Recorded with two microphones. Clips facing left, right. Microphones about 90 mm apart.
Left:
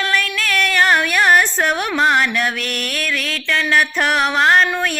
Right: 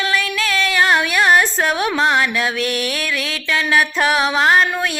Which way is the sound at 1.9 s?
Centre (ahead or behind).